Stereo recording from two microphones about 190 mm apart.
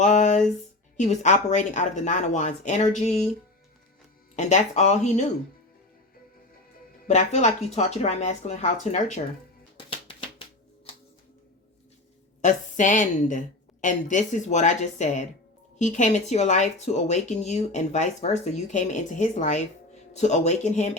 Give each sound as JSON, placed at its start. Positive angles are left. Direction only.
{"t": 0.0, "sound": "a sound", "side_deg": 40}
{"t": 0.9, "sound": "speech", "side_deg": 40}
{"t": 4.4, "sound": "speech", "side_deg": 40}
{"t": 7.1, "sound": "speech", "side_deg": 35}
{"t": 12.4, "sound": "speech", "side_deg": 40}